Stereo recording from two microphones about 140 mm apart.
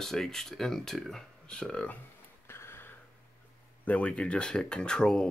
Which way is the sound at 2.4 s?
20° left (ahead or behind).